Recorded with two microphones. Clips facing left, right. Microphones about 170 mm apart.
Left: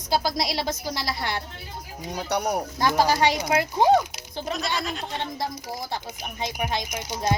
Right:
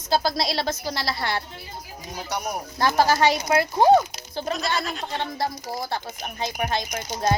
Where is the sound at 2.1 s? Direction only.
65° left (ahead or behind).